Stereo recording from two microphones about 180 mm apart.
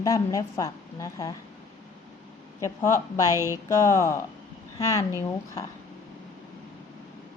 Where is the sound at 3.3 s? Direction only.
15° right (ahead or behind).